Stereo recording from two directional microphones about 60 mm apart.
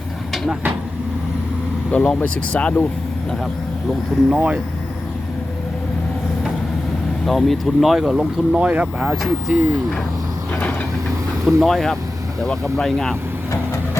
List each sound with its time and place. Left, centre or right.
1.9 s speech: centre
4.4 s speech: right
7.3 s speech: centre
8.6 s speech: centre
9.0 s speech: centre
10.5 s vehicle: left
11.4 s speech: centre